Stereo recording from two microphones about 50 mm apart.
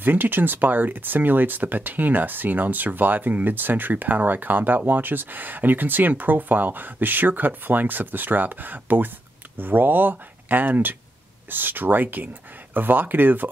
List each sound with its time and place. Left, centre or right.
0.0 s speech: right